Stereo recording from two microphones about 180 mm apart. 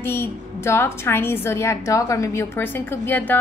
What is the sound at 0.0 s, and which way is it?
A woman's voice, 15° left (ahead or behind).